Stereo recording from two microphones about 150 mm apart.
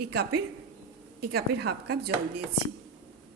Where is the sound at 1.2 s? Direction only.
90° right.